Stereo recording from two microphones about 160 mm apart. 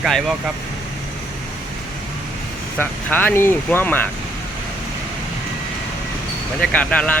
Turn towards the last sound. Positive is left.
turn(degrees=10)  # may be behind; listen again after turning